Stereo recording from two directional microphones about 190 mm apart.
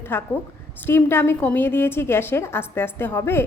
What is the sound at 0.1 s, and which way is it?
A woman's voice, 10° left (ahead or behind).